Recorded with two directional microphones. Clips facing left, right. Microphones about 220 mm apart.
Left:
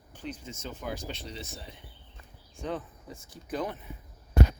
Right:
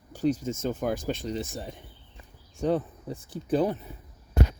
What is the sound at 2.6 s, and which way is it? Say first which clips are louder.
Speech: right 9 dB; 35° right (ahead or behind).